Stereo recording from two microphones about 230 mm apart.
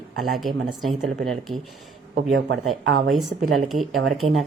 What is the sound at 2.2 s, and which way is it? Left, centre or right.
Speech, right.